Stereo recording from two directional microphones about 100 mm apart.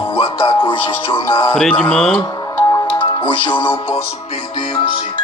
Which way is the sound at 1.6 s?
10° left (ahead or behind).